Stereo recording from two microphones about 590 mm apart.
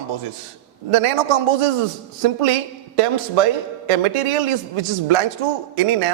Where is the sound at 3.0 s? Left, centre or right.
Right.